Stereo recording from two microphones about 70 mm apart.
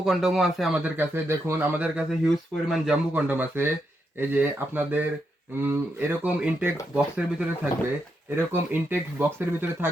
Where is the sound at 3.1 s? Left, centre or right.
Right.